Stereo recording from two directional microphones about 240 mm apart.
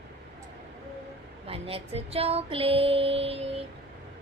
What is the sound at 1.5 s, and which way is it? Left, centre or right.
A woman's voice, right.